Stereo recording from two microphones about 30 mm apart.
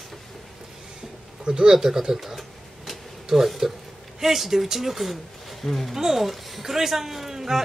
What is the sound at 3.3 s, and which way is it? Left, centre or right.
Speech, centre.